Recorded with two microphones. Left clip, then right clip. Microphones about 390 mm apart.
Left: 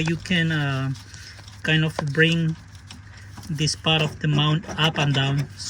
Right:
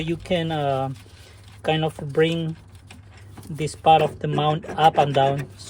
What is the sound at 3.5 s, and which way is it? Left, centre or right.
Speech, centre.